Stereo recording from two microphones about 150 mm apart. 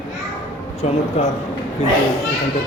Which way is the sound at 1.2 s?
45° left (ahead or behind).